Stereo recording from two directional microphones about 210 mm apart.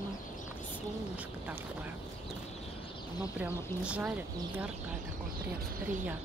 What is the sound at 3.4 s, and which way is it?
Speech, 5° right (ahead or behind).